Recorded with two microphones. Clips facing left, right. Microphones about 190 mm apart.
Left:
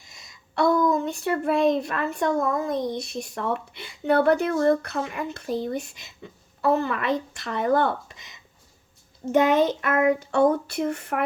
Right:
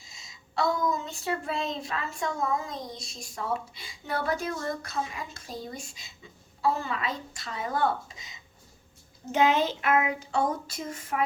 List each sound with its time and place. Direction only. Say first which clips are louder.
0.0 s speech: left 1 dB; 60° left (ahead or behind)
9.3 s speech: left 5 dB; 55° left (ahead or behind)